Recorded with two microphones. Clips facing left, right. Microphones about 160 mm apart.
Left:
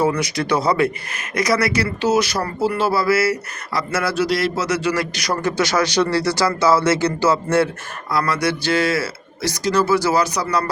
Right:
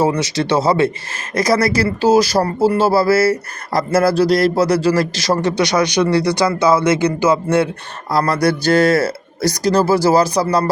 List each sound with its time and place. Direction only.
0.0 s a man's voice: 25° right (ahead or behind)
8.1 s speech: 35° right (ahead or behind)